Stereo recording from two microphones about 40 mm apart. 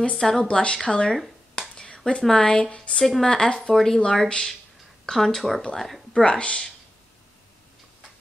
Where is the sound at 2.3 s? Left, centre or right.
Left; by 4.0 s centre.